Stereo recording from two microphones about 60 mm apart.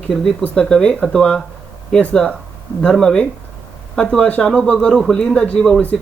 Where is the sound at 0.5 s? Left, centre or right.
Centre.